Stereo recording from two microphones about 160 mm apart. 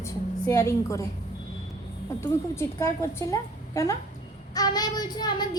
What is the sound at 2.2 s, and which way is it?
A child's voice, 15° left (ahead or behind).